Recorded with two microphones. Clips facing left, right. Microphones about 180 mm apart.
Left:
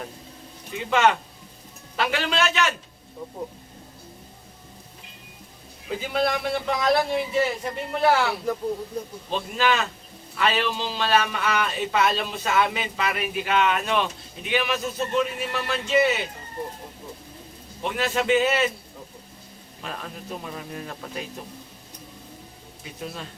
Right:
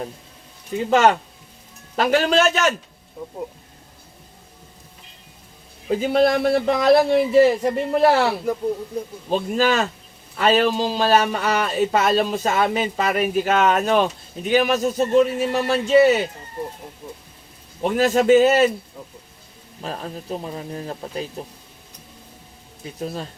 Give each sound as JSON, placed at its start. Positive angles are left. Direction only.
{"t": 0.7, "sound": "a man's voice", "side_deg": -40}
{"t": 5.9, "sound": "a man's voice", "side_deg": -40}
{"t": 9.3, "sound": "a man's voice", "side_deg": -40}
{"t": 17.8, "sound": "a man's voice", "side_deg": -40}
{"t": 19.8, "sound": "a man's voice", "side_deg": -35}
{"t": 23.0, "sound": "a man's voice", "side_deg": -40}